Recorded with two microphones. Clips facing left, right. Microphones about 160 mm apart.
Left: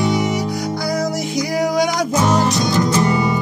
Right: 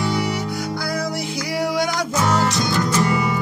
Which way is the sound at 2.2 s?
20° left (ahead or behind).